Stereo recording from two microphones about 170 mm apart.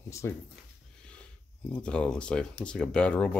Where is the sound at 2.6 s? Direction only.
5° left (ahead or behind).